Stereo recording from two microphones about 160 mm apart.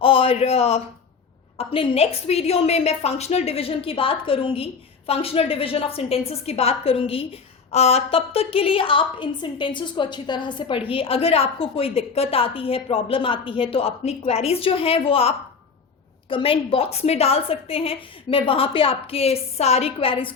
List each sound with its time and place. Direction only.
0.0 s a man's voice: 35° left (ahead or behind)